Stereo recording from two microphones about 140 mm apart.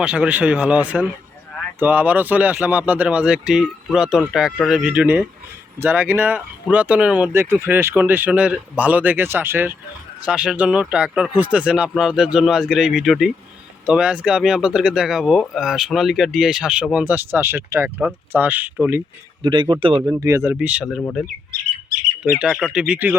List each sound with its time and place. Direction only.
0.0 s speech: 10° right (ahead or behind)
19.4 s speech: 35° right (ahead or behind); by 21.0 s 5° right (ahead or behind)
22.2 s speech: 5° right (ahead or behind)